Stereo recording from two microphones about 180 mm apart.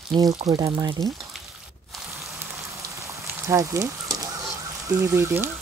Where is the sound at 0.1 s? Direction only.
20° right (ahead or behind).